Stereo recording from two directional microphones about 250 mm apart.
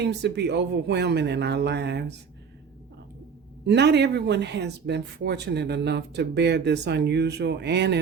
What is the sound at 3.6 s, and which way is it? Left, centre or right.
Speech, right.